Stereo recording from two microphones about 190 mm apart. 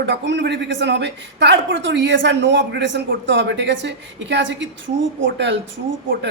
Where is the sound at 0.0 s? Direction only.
65° right (ahead or behind).